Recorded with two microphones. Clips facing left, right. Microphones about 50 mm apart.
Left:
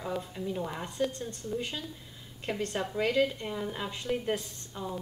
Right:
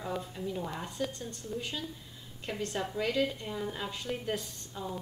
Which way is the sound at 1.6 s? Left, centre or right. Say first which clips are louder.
Left 1 dB; left.